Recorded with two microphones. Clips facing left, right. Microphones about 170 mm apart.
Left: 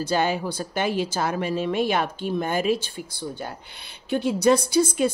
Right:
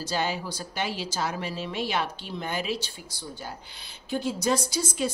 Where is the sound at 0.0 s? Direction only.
55° left (ahead or behind).